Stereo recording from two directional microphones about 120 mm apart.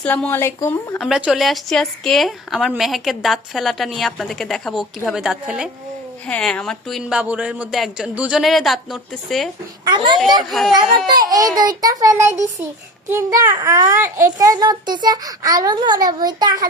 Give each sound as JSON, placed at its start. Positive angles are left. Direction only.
{"t": 0.0, "sound": "a woman's voice", "side_deg": 10}
{"t": 0.3, "sound": "speech", "side_deg": 20}
{"t": 0.9, "sound": "a woman's voice", "side_deg": 0}
{"t": 6.2, "sound": "a woman's voice", "side_deg": 5}
{"t": 7.2, "sound": "a woman's voice", "side_deg": -10}
{"t": 9.8, "sound": "a child's voice", "side_deg": -40}